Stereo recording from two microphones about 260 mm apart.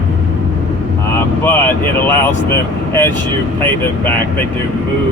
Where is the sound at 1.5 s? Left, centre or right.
Centre.